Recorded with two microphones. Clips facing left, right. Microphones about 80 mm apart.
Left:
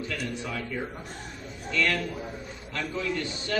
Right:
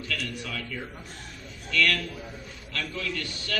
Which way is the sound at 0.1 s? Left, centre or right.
Left.